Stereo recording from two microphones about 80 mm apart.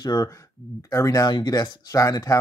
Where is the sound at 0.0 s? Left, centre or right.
Left.